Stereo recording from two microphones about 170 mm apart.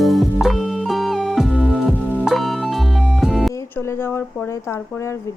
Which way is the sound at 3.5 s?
15° left (ahead or behind).